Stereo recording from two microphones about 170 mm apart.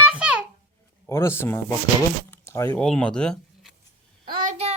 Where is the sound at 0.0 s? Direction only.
10° right (ahead or behind).